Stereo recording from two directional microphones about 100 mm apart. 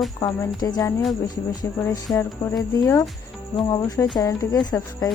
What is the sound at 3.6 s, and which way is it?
Speech, 35° left (ahead or behind).